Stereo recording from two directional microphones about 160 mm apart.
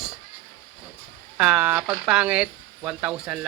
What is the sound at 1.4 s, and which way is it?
Speech, 10° right (ahead or behind).